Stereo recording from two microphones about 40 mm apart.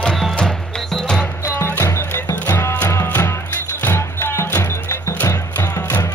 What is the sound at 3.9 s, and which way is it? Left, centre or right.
Music, left.